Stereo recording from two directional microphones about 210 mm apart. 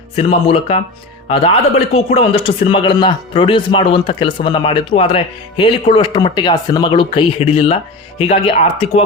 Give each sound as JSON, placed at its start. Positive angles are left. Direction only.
{"t": 0.2, "sound": "a man's voice", "side_deg": 25}